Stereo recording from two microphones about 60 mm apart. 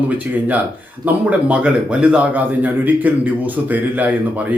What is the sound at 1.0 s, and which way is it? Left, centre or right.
Speech, right.